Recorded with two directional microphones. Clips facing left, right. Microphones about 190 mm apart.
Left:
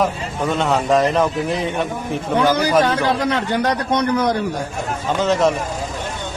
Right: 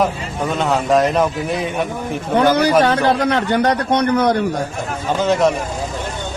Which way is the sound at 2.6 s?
60° right (ahead or behind).